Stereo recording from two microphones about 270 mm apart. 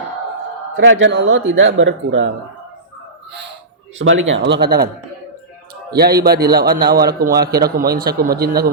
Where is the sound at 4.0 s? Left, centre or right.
Right.